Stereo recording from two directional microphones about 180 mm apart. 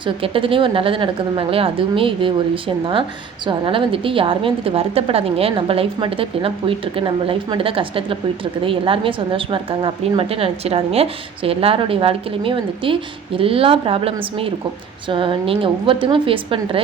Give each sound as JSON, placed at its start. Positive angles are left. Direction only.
{"t": 0.0, "sound": "a woman's voice", "side_deg": -30}